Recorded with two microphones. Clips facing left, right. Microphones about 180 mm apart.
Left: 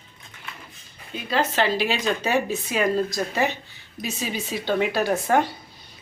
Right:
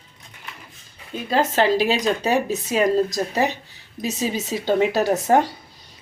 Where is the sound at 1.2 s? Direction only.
40° right (ahead or behind).